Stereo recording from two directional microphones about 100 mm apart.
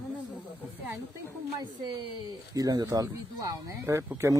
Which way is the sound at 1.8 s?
55° right (ahead or behind).